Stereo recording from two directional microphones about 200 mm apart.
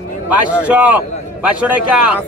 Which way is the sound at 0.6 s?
5° right (ahead or behind).